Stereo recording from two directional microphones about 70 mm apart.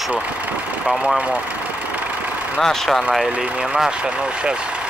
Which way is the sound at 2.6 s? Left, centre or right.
Centre.